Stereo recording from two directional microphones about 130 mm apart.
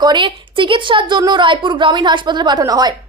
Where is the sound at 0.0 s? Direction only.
35° right (ahead or behind).